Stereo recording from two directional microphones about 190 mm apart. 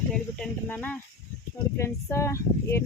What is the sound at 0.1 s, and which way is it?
Speech, 5° left (ahead or behind).